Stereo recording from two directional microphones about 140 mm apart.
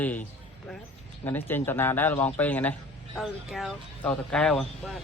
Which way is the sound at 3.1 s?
Centre (ahead or behind).